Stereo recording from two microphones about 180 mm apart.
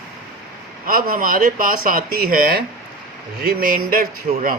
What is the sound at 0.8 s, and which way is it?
Speech, 50° right (ahead or behind).